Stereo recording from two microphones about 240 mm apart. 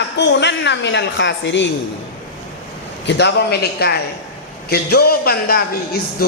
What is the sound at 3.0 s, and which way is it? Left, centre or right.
A woman's voice, left.